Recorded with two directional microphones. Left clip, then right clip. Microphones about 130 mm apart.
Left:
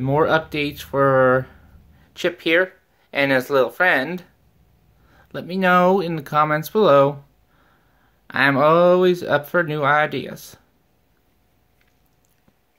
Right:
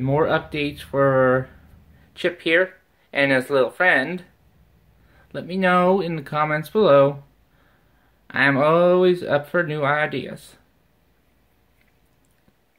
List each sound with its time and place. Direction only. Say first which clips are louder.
0.0 s speech: left 2 dB; 15° left (ahead or behind)
8.3 s speech: left 2 dB; 20° left (ahead or behind)